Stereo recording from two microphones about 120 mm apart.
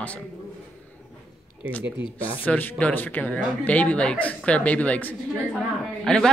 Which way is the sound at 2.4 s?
15° left (ahead or behind).